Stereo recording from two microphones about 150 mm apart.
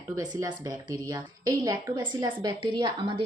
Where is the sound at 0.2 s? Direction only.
25° right (ahead or behind).